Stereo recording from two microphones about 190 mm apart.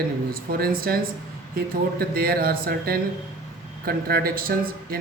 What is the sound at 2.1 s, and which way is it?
Speech, 50° right (ahead or behind).